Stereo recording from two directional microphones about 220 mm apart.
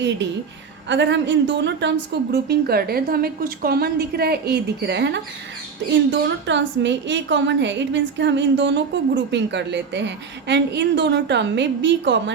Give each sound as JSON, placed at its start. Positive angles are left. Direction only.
{"t": 0.9, "sound": "a woman's voice", "side_deg": -55}